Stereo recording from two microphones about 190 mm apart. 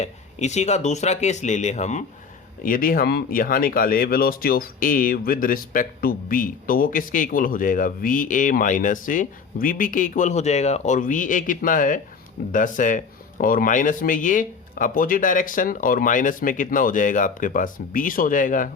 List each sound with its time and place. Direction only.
0.0 s speech: 35° left (ahead or behind)